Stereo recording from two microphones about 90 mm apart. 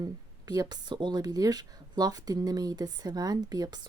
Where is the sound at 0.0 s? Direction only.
45° right (ahead or behind).